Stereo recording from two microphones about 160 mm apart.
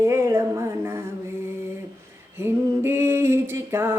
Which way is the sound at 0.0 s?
15° right (ahead or behind).